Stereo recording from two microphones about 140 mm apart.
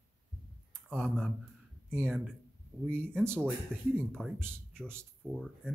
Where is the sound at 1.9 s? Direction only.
15° right (ahead or behind).